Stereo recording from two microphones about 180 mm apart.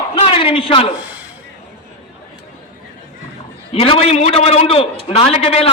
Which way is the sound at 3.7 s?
35° left (ahead or behind).